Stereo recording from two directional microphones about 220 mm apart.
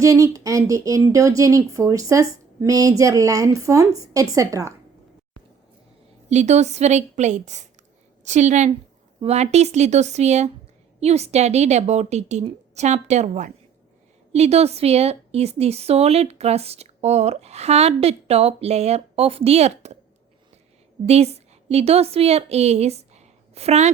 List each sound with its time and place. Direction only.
0.0 s speech: 15° right (ahead or behind)
6.2 s a woman's voice: 30° right (ahead or behind)
21.1 s a woman's voice: 30° right (ahead or behind)